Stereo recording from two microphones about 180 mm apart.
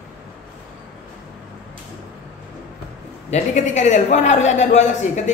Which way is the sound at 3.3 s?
40° left (ahead or behind).